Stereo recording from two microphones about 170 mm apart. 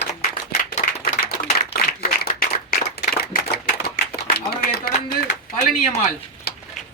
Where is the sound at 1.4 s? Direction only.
50° left (ahead or behind).